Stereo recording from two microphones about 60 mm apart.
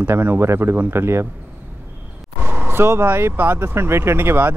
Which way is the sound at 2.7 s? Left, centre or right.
Right.